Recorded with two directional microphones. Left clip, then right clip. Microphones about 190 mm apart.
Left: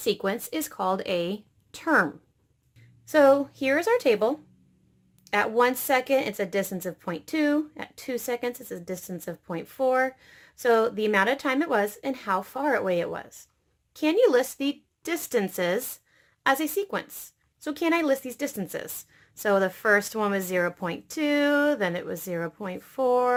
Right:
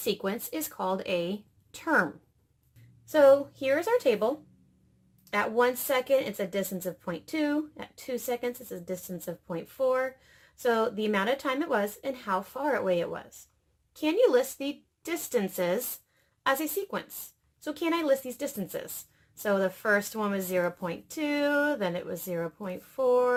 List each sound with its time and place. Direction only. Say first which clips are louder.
0.0 s speech: left 4 dB; 25° left (ahead or behind)
3.1 s a woman's voice: left 1 dB; 30° left (ahead or behind)